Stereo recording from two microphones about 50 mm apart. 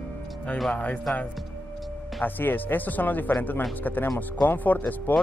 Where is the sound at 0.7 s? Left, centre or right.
Left.